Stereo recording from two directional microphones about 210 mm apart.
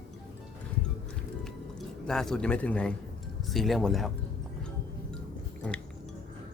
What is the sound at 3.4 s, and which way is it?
Speech, centre (ahead or behind).